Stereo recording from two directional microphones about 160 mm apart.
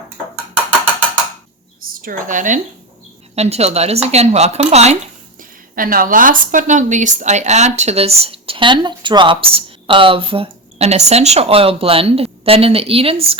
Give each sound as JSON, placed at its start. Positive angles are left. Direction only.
{"t": 1.8, "sound": "speech", "side_deg": -60}
{"t": 3.3, "sound": "a woman's voice", "side_deg": -40}
{"t": 5.4, "sound": "a woman's voice", "side_deg": -60}